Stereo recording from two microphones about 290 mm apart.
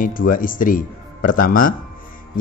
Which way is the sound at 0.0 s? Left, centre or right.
Left.